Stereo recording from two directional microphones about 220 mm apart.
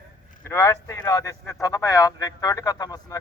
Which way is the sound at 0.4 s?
10° left (ahead or behind).